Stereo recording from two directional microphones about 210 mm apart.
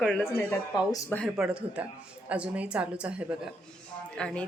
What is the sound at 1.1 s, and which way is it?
Speech, centre (ahead or behind).